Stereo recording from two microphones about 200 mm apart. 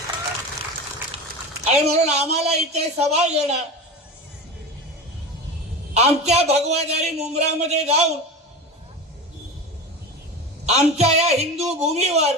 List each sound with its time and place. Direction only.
1.7 s a man's voice: 35° right (ahead or behind)
5.9 s a man's voice: 30° right (ahead or behind)
10.7 s a man's voice: 35° right (ahead or behind)